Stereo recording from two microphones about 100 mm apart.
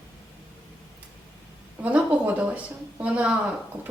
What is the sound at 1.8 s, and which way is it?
A woman's voice, 15° right (ahead or behind).